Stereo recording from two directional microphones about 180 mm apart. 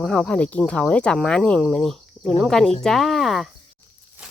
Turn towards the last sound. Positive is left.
turn(degrees=0)  # may be behind; listen again after turning